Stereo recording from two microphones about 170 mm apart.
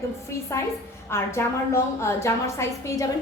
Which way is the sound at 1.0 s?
15° left (ahead or behind).